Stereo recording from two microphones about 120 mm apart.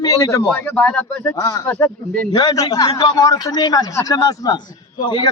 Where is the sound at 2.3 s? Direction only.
30° left (ahead or behind).